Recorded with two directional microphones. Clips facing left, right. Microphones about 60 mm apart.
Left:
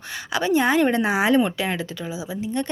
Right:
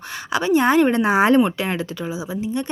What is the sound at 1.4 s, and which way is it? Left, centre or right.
Speech, right.